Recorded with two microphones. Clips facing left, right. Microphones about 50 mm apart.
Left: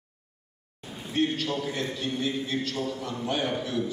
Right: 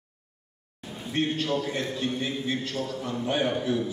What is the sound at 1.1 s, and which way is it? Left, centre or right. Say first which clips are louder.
Speech: even; right.